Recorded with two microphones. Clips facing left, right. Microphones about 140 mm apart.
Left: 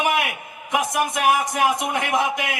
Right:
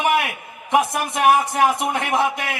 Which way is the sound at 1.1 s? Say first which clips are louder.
Right 6 dB; 30° right (ahead or behind).